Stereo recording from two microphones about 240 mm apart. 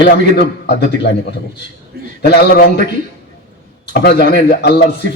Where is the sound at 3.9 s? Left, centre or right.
Left.